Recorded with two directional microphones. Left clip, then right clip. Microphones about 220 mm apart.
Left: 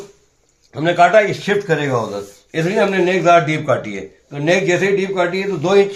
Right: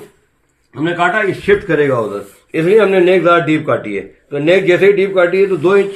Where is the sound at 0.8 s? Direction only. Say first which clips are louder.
Left 3 dB; 50° left (ahead or behind).